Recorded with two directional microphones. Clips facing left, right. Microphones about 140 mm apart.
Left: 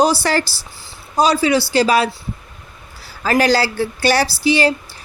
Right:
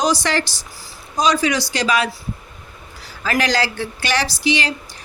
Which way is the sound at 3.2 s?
35° left (ahead or behind).